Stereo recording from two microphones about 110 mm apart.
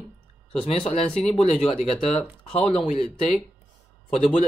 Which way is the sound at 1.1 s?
5° left (ahead or behind).